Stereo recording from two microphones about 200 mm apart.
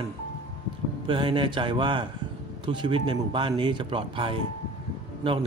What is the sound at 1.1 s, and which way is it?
A man's voice, 25° right (ahead or behind).